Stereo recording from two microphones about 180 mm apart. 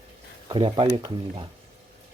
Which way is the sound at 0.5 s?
30° right (ahead or behind).